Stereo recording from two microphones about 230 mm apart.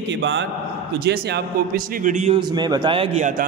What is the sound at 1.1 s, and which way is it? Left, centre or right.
A man's voice, right.